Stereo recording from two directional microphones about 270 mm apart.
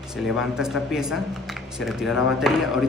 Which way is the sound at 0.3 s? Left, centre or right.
Centre.